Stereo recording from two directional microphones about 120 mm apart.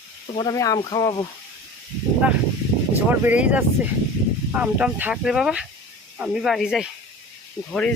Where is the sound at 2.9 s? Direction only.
15° right (ahead or behind).